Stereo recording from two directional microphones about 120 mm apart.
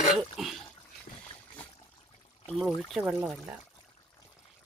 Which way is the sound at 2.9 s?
5° right (ahead or behind).